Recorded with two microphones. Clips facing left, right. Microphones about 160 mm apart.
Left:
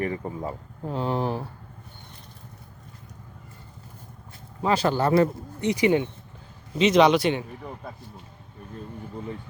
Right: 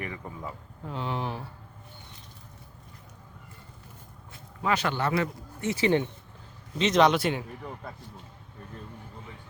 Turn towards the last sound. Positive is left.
turn(degrees=0)  # may be behind; listen again after turning